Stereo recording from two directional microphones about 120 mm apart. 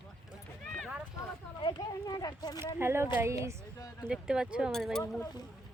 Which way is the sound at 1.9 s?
35° left (ahead or behind).